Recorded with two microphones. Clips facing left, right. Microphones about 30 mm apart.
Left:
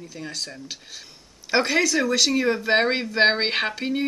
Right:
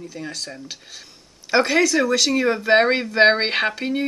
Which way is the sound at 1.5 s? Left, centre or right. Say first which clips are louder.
Right 3 dB; centre.